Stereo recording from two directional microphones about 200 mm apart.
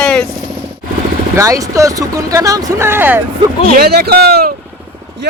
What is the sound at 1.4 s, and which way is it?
Speech, 15° right (ahead or behind).